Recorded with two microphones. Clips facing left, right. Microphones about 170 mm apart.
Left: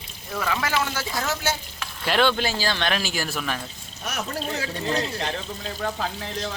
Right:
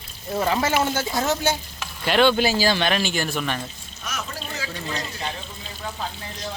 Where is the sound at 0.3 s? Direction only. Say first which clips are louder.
Right 5 dB; 30° right (ahead or behind).